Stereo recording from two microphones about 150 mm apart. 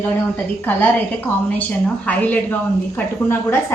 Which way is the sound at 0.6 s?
15° left (ahead or behind).